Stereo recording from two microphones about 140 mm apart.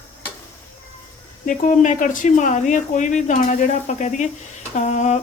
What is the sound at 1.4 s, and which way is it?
Speech, 65° left (ahead or behind).